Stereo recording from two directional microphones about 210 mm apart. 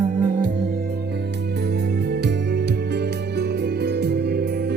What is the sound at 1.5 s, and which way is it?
Music, 50° right (ahead or behind).